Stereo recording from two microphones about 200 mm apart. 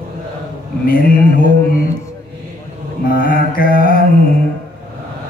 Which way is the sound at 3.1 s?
45° left (ahead or behind).